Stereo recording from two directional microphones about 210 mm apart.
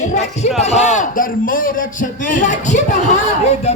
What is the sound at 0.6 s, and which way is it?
A man's voice, 30° left (ahead or behind).